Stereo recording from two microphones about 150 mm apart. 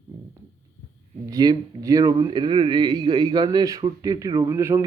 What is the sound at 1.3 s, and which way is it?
A man's voice, 25° right (ahead or behind).